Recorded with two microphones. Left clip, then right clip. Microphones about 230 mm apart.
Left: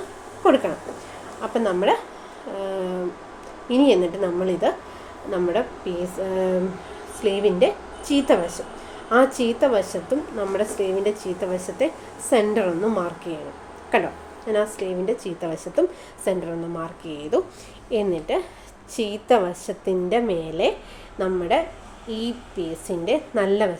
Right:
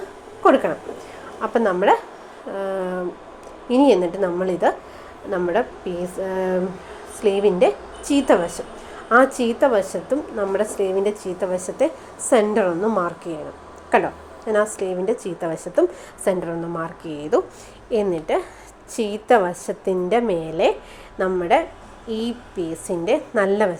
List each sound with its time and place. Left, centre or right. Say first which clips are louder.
0.4 s a woman's voice: right 2 dB; centre